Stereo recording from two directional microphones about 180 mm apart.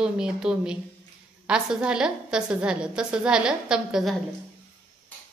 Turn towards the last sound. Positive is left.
turn(degrees=0)  # may be behind; listen again after turning